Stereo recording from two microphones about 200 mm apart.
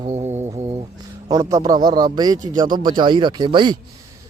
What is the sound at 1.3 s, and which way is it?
Speech, 15° right (ahead or behind).